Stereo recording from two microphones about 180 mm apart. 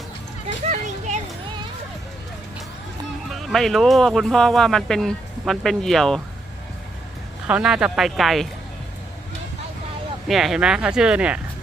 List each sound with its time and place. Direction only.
0.4 s children playing: 40° right (ahead or behind)
3.2 s speech: centre (ahead or behind)
7.4 s speech: 5° right (ahead or behind)
10.2 s speech: centre (ahead or behind)